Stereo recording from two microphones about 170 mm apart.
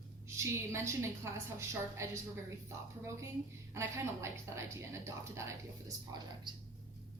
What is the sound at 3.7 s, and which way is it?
A woman's voice, 15° right (ahead or behind).